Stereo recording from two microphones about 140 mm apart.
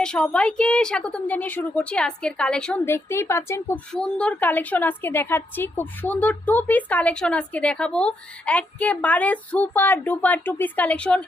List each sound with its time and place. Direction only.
0.0 s a woman's voice: 5° left (ahead or behind)
2.8 s a woman's voice: 20° left (ahead or behind)
3.9 s a woman's voice: 5° left (ahead or behind)